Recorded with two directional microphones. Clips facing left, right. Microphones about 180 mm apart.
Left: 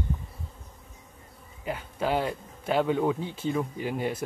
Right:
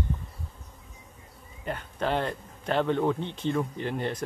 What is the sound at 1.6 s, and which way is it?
Speech, 5° left (ahead or behind).